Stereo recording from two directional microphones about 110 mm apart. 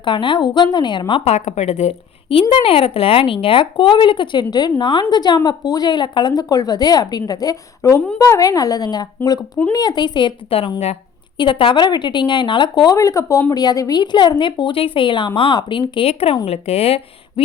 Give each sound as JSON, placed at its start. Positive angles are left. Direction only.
{"t": 0.0, "sound": "speech", "side_deg": 50}
{"t": 1.3, "sound": "a woman's voice", "side_deg": 90}
{"t": 2.5, "sound": "a woman's voice", "side_deg": 55}
{"t": 16.5, "sound": "speech", "side_deg": 70}